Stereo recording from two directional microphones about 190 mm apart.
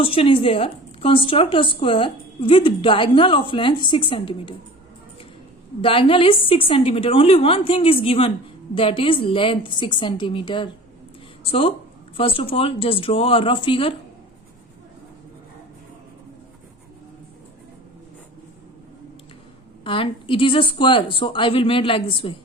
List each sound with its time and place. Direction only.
0.0 s speech: 30° left (ahead or behind)
5.8 s speech: 30° left (ahead or behind)
19.8 s speech: 25° left (ahead or behind)